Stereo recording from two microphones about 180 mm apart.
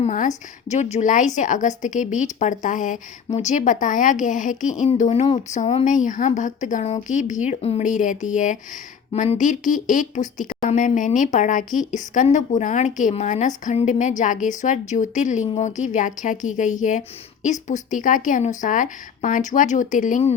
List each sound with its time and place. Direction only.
0.0 s a woman's voice: 40° left (ahead or behind)